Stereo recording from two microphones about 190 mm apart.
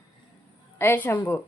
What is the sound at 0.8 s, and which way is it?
Speech, 10° left (ahead or behind).